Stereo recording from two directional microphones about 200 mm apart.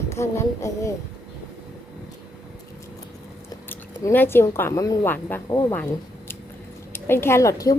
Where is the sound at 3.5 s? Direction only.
10° left (ahead or behind).